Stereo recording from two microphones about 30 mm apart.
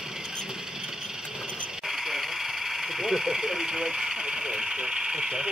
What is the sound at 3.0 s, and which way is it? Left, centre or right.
Speech, centre.